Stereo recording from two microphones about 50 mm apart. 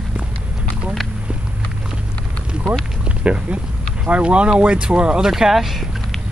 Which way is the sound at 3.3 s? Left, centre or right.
Right.